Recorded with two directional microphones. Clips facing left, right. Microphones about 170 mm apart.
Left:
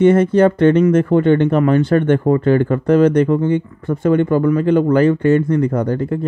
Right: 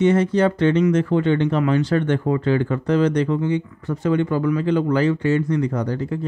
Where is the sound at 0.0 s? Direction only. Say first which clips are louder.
Left 6 dB; 55° left (ahead or behind).